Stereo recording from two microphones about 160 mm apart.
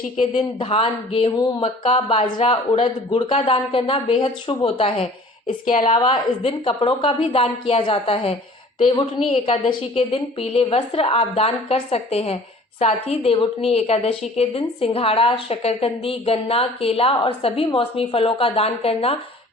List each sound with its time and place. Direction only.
0.3 s a woman's voice: 35° left (ahead or behind)